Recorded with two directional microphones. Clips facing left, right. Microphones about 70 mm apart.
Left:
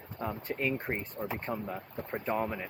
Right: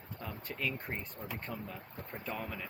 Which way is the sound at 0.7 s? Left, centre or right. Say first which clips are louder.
Left 7 dB; left.